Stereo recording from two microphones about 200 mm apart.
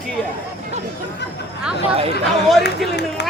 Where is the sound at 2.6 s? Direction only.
55° left (ahead or behind).